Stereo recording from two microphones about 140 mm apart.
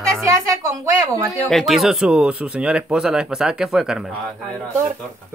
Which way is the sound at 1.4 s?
Centre (ahead or behind).